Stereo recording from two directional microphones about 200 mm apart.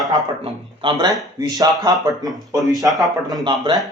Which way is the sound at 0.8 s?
20° right (ahead or behind).